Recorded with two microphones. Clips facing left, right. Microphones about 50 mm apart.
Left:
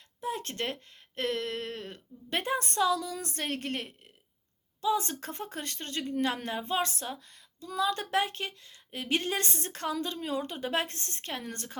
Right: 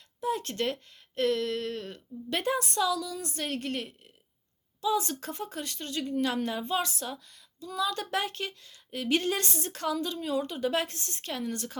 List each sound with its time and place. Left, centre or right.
0.2 s a woman's voice: left
3.4 s a woman's voice: left